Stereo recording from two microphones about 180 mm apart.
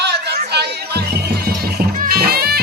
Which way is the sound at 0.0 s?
65° right (ahead or behind).